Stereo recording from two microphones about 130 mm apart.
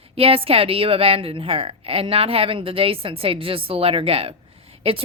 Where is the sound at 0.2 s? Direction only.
45° right (ahead or behind).